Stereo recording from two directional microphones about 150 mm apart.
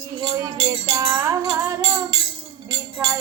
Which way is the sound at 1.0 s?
15° right (ahead or behind).